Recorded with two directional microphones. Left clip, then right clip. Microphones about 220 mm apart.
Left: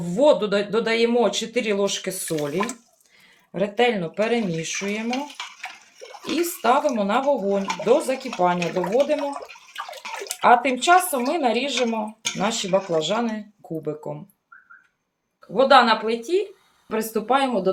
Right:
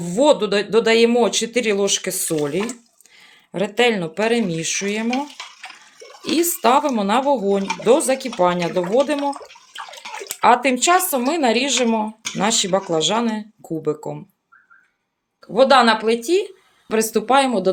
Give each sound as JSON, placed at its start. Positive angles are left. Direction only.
{"t": 0.0, "sound": "speech", "side_deg": -35}
{"t": 3.5, "sound": "speech", "side_deg": -40}
{"t": 6.2, "sound": "speech", "side_deg": -35}
{"t": 10.4, "sound": "speech", "side_deg": -35}
{"t": 15.5, "sound": "speech", "side_deg": -45}